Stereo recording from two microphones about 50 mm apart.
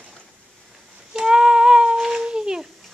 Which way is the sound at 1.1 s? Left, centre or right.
Centre.